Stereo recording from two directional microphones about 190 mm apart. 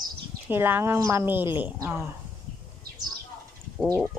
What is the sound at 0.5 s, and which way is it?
Speech, 10° right (ahead or behind).